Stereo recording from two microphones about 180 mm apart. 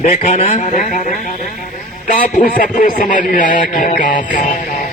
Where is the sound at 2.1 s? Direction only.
50° left (ahead or behind).